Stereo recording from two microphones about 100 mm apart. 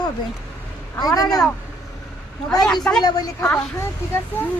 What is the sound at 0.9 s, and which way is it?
Speech, 40° left (ahead or behind).